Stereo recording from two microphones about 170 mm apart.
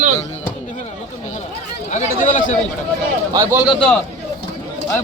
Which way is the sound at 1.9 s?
50° left (ahead or behind).